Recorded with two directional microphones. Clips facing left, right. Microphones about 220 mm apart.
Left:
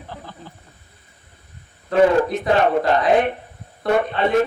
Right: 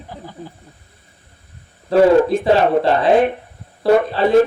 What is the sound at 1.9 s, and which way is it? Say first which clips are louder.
A man's voice: right 4 dB; 30° right (ahead or behind).